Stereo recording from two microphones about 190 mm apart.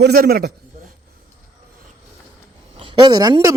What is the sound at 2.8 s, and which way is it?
Speech, 20° right (ahead or behind).